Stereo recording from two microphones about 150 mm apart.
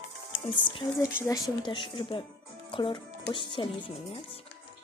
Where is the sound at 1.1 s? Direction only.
25° left (ahead or behind).